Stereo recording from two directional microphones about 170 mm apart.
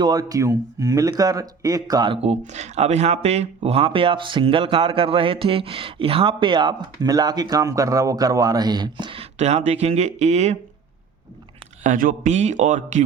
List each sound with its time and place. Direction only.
0.0 s speech: 20° right (ahead or behind); by 10.6 s 40° right (ahead or behind)
11.8 s speech: 50° right (ahead or behind)